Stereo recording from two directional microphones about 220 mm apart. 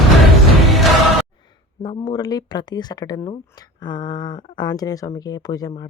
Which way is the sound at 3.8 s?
20° left (ahead or behind).